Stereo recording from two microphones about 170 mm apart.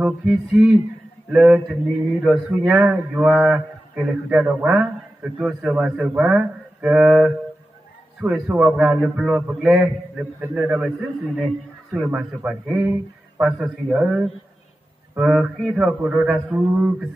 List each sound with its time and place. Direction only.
0.0 s a man's voice: 10° right (ahead or behind)
16.5 s a man's voice: 20° right (ahead or behind)